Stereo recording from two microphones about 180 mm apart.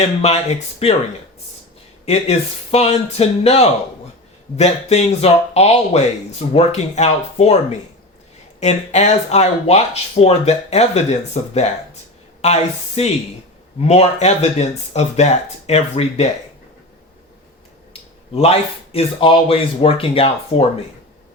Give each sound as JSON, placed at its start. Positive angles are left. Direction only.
{"t": 0.2, "sound": "speech", "side_deg": 35}
{"t": 2.0, "sound": "speech", "side_deg": 35}
{"t": 18.3, "sound": "speech", "side_deg": 35}